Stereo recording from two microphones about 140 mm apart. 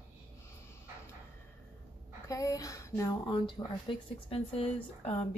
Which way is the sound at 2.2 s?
25° left (ahead or behind).